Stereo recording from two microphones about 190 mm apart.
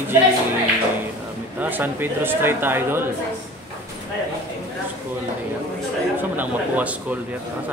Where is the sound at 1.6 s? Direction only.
10° right (ahead or behind).